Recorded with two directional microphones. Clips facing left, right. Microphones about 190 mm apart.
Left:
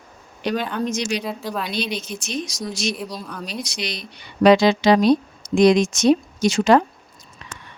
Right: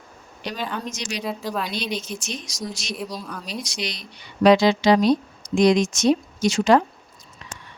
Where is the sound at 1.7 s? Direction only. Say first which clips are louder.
Left 2 dB; 65° left (ahead or behind).